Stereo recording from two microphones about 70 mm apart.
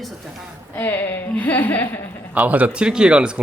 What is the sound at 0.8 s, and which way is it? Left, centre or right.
Speech, left.